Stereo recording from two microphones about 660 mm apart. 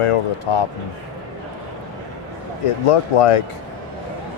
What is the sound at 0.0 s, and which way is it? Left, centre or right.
Speech, left.